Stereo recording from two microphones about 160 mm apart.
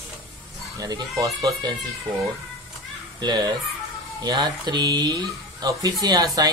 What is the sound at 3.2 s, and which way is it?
Speech, 25° right (ahead or behind).